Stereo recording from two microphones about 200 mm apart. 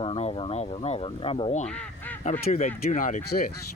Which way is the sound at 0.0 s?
25° left (ahead or behind).